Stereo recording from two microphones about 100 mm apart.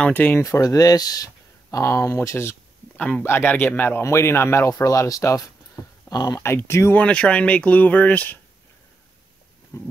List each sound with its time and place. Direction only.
0.1 s speech: 20° left (ahead or behind)
0.4 s speech: 35° left (ahead or behind)
6.4 s speech: 25° left (ahead or behind)
7.0 s speech: 10° left (ahead or behind)
9.7 s speech: 30° left (ahead or behind)